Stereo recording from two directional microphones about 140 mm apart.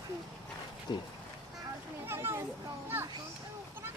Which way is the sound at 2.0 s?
15° right (ahead or behind).